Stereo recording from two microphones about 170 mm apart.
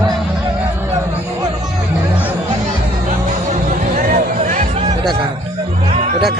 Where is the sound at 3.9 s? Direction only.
50° right (ahead or behind).